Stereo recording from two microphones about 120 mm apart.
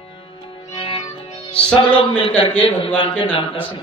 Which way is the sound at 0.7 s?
50° left (ahead or behind).